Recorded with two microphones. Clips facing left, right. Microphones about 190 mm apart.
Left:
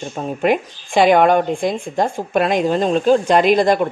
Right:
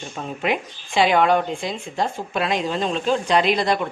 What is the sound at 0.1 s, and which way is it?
Speech, 45° left (ahead or behind).